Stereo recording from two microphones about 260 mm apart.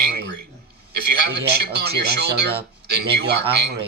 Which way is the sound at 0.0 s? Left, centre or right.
Right.